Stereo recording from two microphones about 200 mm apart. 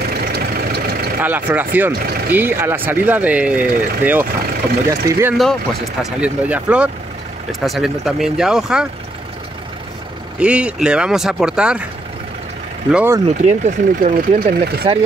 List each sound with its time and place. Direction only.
0.1 s vehicle: 55° right (ahead or behind)
1.2 s speech: 10° right (ahead or behind)
5.4 s speech: centre (ahead or behind)
10.4 s speech: 5° right (ahead or behind)
12.9 s speech: 10° right (ahead or behind)
13.4 s speech: 35° right (ahead or behind)
14.6 s speech: 55° right (ahead or behind)